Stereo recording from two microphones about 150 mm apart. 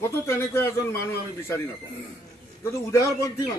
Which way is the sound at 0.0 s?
15° left (ahead or behind).